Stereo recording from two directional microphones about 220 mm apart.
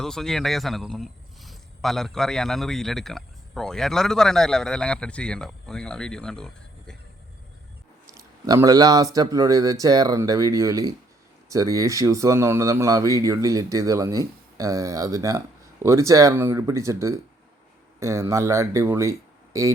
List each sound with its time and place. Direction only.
0.0 s speech: centre (ahead or behind)
8.1 s speech: 15° right (ahead or behind)